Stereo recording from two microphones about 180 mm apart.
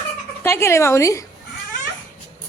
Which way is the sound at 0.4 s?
15° left (ahead or behind).